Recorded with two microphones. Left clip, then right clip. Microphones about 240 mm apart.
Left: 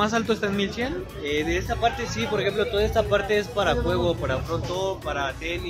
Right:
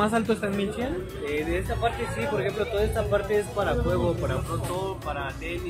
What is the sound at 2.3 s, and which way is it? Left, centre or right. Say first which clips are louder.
Speech: left 4 dB; left.